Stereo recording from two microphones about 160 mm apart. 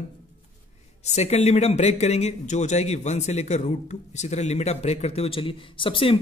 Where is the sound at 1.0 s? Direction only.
40° left (ahead or behind).